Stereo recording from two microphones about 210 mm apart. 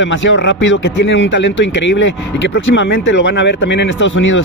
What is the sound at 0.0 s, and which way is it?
A man's voice, 60° left (ahead or behind).